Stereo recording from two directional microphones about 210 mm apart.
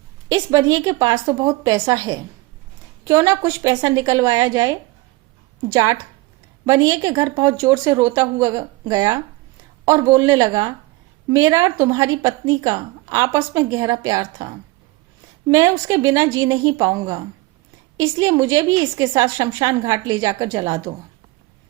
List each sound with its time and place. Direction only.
0.3 s a woman's voice: 15° right (ahead or behind)